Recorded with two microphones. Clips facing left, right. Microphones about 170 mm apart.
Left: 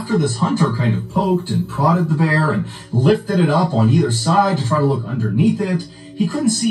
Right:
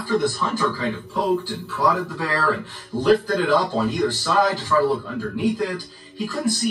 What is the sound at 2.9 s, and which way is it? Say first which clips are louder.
Speech: left 3 dB; 45° left (ahead or behind).